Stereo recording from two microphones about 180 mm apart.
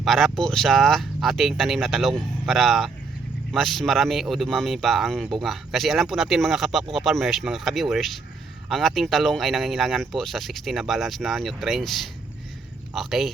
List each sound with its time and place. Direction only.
0.0 s a man's voice: centre (ahead or behind)